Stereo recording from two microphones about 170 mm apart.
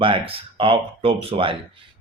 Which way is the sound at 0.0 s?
30° right (ahead or behind).